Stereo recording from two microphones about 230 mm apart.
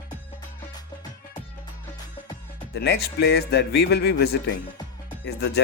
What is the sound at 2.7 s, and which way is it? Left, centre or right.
Speech, left.